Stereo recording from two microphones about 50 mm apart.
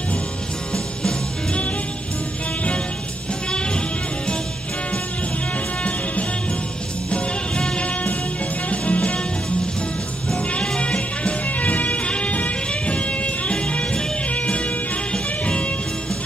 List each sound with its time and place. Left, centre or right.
1.0 s music: left
7.1 s music: left
10.5 s music: left